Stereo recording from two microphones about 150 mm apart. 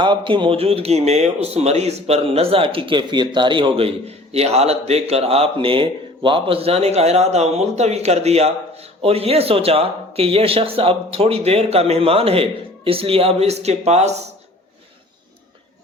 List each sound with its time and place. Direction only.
0.0 s a man's voice: 30° right (ahead or behind)